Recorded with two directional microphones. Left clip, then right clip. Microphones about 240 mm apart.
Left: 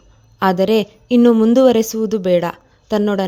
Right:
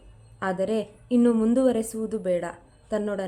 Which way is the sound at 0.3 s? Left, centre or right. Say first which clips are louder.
Left 12 dB; left.